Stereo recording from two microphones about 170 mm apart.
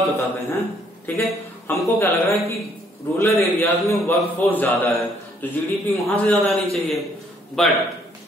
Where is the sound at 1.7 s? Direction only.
15° left (ahead or behind).